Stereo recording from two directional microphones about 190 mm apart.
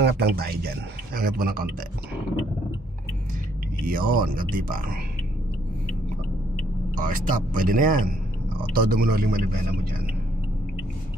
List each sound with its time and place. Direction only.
0.0 s a man's voice: 55° right (ahead or behind)
3.8 s a man's voice: 50° right (ahead or behind)
7.0 s a man's voice: 45° right (ahead or behind)